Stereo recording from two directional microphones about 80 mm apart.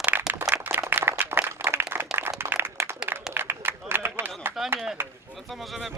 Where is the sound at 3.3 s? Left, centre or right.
Right.